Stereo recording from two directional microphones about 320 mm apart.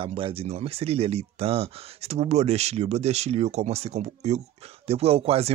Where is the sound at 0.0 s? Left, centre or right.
Centre.